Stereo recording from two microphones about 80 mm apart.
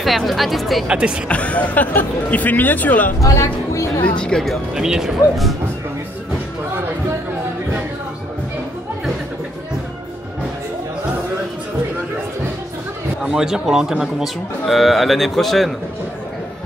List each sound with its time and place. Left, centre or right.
0.0 s speech: centre
0.8 s speech: centre
1.3 s speech: centre
3.2 s speech: left
4.2 s speech: centre
4.7 s speech: centre
13.2 s speech: centre